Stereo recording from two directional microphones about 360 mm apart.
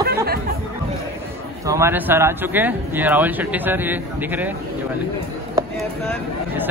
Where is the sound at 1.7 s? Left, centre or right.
Centre.